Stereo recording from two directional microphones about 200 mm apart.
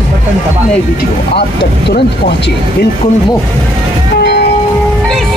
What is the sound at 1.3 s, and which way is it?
Speech, 55° left (ahead or behind).